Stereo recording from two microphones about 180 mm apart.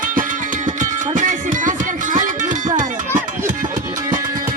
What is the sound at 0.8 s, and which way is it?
Music, 45° right (ahead or behind).